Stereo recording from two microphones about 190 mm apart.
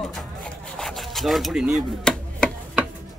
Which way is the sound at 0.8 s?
Centre (ahead or behind).